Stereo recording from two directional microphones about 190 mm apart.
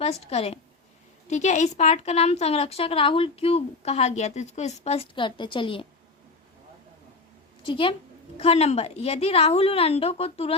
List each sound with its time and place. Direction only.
0.0 s a woman's voice: 35° left (ahead or behind)
7.7 s a woman's voice: 30° left (ahead or behind)